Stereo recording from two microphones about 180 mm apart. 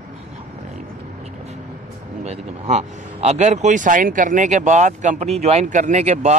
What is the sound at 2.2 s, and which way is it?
Speech, 40° right (ahead or behind).